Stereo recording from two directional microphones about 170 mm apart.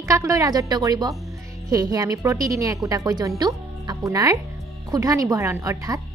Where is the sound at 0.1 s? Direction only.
20° right (ahead or behind).